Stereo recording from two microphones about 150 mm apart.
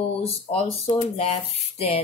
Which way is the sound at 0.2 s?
45° left (ahead or behind).